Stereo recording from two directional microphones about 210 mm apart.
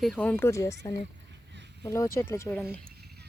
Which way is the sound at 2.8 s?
50° right (ahead or behind).